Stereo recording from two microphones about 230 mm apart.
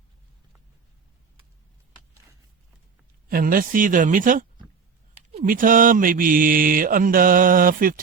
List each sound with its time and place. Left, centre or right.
3.2 s mantra: right